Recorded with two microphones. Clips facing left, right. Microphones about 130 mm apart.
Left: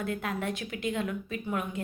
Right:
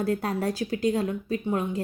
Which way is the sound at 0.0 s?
35° right (ahead or behind).